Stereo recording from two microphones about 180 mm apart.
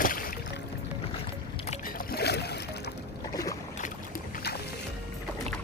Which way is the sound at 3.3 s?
20° left (ahead or behind).